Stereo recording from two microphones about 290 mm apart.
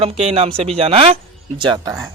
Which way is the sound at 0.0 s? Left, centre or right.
Right.